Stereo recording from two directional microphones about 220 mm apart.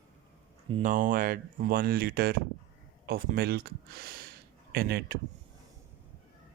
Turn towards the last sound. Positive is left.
turn(degrees=-45)  # may be behind; listen again after turning